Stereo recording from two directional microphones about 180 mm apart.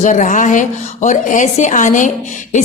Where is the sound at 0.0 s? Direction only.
45° left (ahead or behind).